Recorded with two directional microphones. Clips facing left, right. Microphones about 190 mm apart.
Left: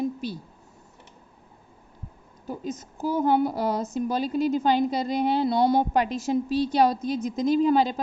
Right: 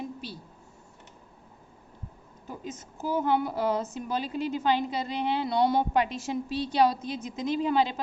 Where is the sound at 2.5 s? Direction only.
35° left (ahead or behind).